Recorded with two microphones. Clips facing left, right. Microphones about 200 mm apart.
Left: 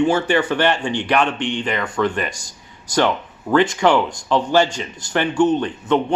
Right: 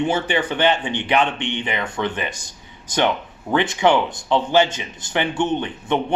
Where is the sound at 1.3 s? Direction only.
65° right (ahead or behind).